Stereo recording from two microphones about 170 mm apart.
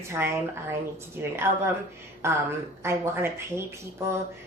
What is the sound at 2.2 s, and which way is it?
Speech, 15° right (ahead or behind).